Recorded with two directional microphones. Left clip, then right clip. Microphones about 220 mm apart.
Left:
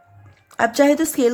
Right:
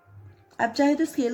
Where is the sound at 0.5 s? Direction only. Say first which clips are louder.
Left 7 dB; 35° left (ahead or behind).